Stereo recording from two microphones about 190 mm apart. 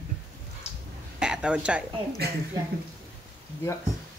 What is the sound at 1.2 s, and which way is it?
Speech, 5° right (ahead or behind).